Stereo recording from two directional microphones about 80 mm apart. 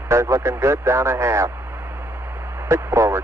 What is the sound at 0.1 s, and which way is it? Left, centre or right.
Speech, right.